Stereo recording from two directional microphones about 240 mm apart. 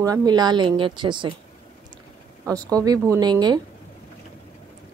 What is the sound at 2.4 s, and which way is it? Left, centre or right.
A woman's voice, centre.